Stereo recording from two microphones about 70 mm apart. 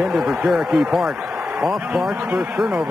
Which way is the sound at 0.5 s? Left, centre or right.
Centre.